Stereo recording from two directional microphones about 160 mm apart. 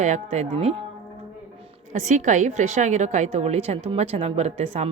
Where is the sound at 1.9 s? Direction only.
50° right (ahead or behind).